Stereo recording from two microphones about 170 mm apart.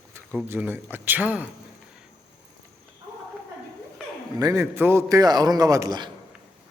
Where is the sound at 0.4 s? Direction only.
10° right (ahead or behind).